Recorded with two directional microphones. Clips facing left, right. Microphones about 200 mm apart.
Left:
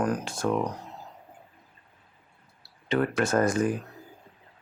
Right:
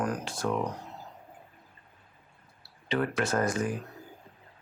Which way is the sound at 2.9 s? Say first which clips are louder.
Left 4 dB; 45° left (ahead or behind).